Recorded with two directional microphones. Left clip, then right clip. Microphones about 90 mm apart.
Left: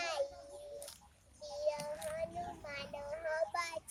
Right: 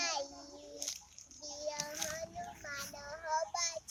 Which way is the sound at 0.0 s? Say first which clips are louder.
Even; 20° left (ahead or behind).